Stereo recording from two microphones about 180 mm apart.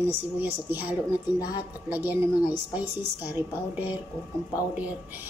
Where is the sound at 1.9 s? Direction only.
10° right (ahead or behind).